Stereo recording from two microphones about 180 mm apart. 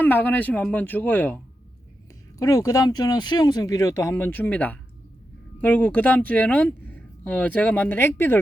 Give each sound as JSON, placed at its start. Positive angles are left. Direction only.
{"t": 0.0, "sound": "speech", "side_deg": 10}
{"t": 2.4, "sound": "speech", "side_deg": 20}